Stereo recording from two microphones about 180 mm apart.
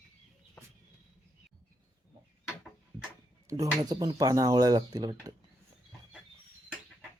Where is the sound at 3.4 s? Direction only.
20° right (ahead or behind).